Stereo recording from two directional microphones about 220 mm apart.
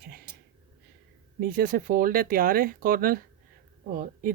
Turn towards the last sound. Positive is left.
turn(degrees=-40)  # may be behind; listen again after turning